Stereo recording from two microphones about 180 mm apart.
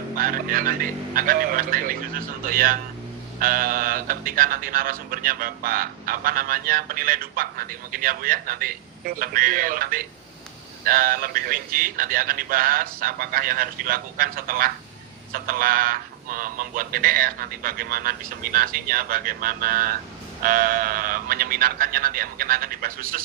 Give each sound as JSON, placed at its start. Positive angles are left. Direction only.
{"t": 0.2, "sound": "speech", "side_deg": -50}